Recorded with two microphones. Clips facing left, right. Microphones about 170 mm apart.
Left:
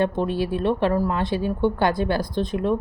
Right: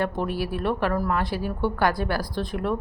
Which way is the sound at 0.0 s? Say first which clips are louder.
Left 4 dB; 25° left (ahead or behind).